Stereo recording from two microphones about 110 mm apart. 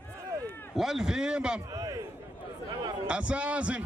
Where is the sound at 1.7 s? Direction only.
30° right (ahead or behind).